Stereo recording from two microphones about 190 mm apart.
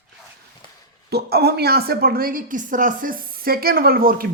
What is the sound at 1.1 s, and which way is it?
A woman's voice, 55° right (ahead or behind).